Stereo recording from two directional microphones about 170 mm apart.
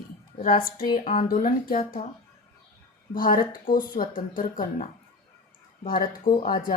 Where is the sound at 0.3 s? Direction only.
55° left (ahead or behind).